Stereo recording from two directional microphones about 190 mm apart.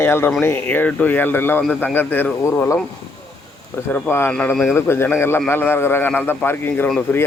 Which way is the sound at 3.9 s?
10° left (ahead or behind).